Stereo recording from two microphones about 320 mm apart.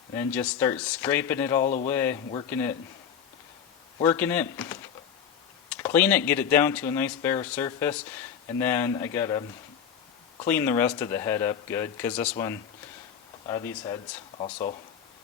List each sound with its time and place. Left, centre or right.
0.1 s speech: centre
1.6 s speech: left
1.9 s speech: centre
4.0 s speech: centre
10.4 s speech: centre
13.8 s speech: centre